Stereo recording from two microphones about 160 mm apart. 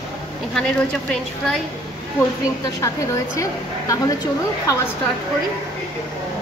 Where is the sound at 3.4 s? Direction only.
20° left (ahead or behind).